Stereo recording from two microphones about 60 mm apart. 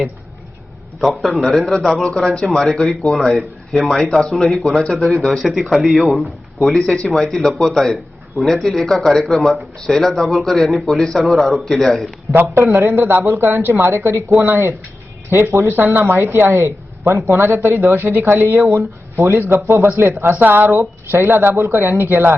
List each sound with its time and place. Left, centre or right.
1.0 s a man's voice: centre
12.3 s speech: right
13.2 s speech: right
17.2 s speech: right
17.4 s speech: right
18.7 s speech: right
20.3 s speech: right
20.7 s speech: right
21.5 s speech: right
21.8 s speech: right